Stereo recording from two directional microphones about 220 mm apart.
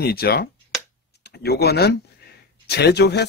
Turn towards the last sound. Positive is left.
turn(degrees=50)  # may be behind; listen again after turning